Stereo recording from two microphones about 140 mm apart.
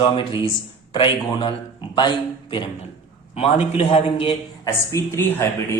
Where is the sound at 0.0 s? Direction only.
35° left (ahead or behind).